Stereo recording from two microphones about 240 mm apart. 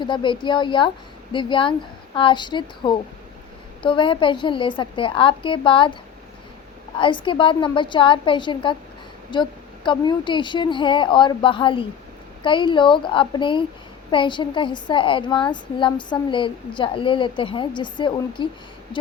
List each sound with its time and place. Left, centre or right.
0.0 s a woman's voice: centre
7.0 s a woman's voice: left